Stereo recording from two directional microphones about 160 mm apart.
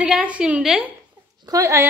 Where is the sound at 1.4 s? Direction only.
20° right (ahead or behind).